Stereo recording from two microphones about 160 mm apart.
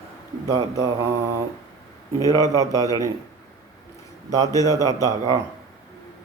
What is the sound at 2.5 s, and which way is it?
Speech, 20° right (ahead or behind).